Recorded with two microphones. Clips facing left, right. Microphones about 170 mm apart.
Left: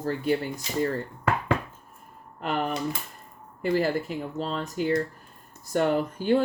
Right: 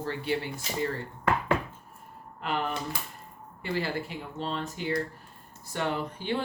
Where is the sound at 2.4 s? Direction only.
45° left (ahead or behind).